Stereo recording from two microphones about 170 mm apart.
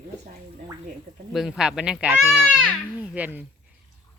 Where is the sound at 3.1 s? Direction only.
10° right (ahead or behind).